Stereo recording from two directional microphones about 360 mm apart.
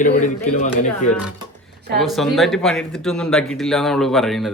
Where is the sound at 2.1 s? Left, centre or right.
Centre.